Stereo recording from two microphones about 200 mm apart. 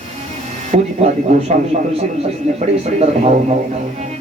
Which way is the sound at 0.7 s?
35° right (ahead or behind).